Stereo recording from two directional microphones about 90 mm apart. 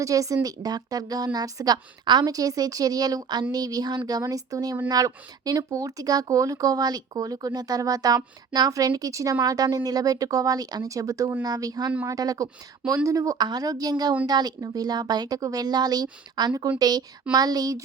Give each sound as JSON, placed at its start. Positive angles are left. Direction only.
{"t": 0.0, "sound": "speech", "side_deg": -40}